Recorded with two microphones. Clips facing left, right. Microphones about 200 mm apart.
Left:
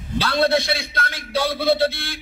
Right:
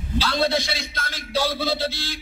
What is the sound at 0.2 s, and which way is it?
A man's voice, 60° left (ahead or behind).